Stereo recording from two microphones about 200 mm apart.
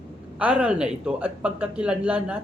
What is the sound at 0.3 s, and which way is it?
A man's voice, 5° right (ahead or behind).